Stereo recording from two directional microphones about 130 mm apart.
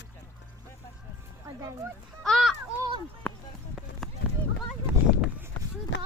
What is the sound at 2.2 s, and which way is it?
Children playing, centre (ahead or behind).